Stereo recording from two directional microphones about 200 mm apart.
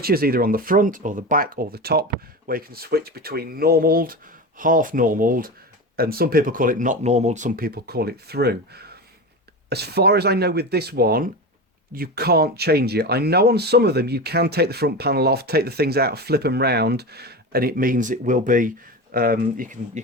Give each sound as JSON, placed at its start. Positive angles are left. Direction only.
{"t": 0.0, "sound": "speech", "side_deg": -50}